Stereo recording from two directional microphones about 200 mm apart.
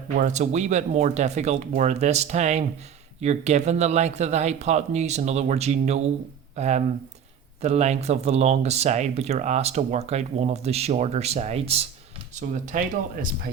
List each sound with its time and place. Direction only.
0.2 s speech: 35° right (ahead or behind)